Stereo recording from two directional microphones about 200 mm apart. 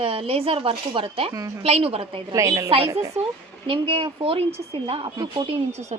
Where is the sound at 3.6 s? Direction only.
30° right (ahead or behind).